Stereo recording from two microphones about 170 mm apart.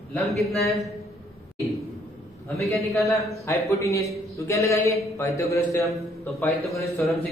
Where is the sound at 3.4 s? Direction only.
15° left (ahead or behind).